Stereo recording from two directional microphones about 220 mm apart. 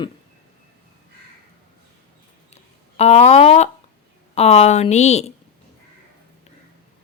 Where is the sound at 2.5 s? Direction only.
30° left (ahead or behind).